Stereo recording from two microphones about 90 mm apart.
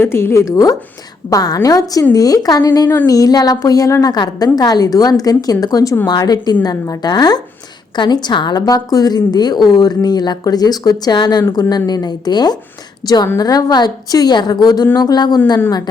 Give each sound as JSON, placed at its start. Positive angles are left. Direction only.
{"t": 0.0, "sound": "a woman's voice", "side_deg": 25}